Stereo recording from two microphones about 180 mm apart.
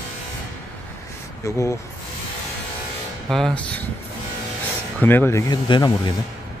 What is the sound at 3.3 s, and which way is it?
Speech, centre (ahead or behind).